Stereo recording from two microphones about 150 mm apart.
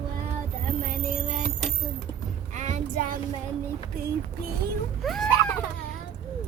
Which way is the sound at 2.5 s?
55° right (ahead or behind).